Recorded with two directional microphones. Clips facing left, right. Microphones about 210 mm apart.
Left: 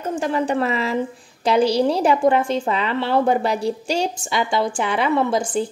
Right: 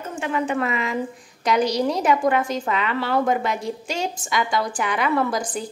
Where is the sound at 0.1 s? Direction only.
35° left (ahead or behind).